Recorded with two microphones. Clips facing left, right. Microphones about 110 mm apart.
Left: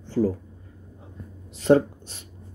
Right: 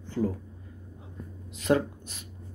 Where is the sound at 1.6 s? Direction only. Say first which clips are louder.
Left 7 dB; 35° left (ahead or behind).